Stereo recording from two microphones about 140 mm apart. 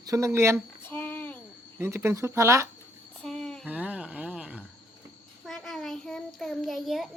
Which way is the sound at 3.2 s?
5° left (ahead or behind).